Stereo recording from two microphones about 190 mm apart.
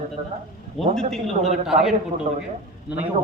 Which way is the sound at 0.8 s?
Centre (ahead or behind).